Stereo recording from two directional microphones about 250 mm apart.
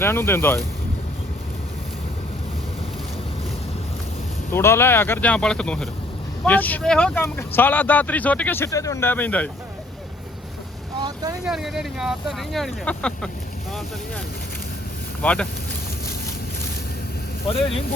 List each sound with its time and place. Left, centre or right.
0.0 s speech: centre
4.5 s speech: centre
11.0 s vehicle: centre
11.4 s speech: centre
15.2 s speech: centre